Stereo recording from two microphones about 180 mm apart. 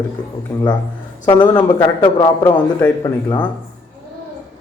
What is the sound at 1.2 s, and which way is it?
Speech, 25° left (ahead or behind).